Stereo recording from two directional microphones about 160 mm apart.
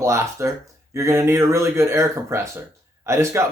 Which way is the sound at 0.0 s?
20° right (ahead or behind).